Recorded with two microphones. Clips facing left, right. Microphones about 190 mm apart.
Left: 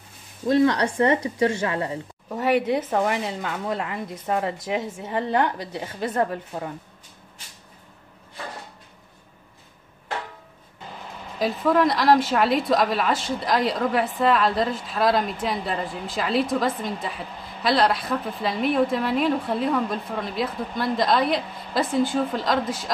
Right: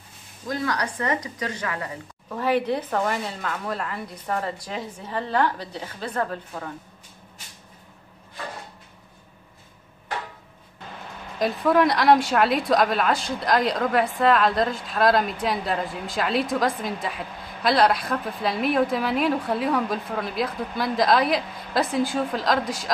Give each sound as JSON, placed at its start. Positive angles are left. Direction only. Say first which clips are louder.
{"t": 0.5, "sound": "speech", "louder": "left 8 dB", "side_deg": 30}
{"t": 11.3, "sound": "speech", "louder": "right 1 dB", "side_deg": 0}